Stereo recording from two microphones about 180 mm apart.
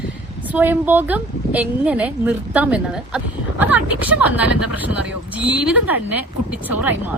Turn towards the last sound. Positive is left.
turn(degrees=-10)  # may be behind; listen again after turning